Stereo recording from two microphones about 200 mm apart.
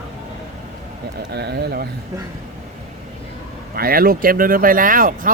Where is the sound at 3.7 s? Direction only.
50° right (ahead or behind).